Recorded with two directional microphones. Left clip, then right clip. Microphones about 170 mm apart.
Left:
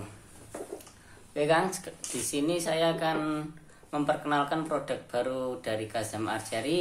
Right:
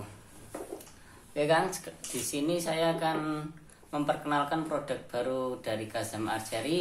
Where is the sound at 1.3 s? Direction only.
20° left (ahead or behind).